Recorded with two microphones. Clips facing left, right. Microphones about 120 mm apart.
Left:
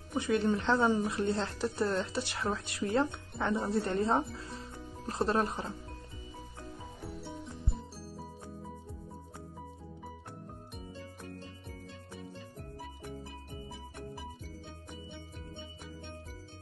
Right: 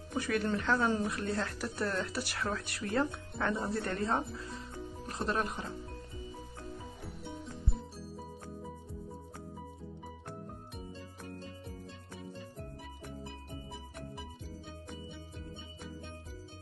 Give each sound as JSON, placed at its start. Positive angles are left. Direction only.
{"t": 0.1, "sound": "speech", "side_deg": 25}
{"t": 0.8, "sound": "a woman's voice", "side_deg": 15}
{"t": 1.1, "sound": "speech", "side_deg": 25}